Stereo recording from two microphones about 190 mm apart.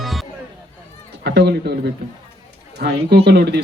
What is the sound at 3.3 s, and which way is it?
Speech, 60° right (ahead or behind).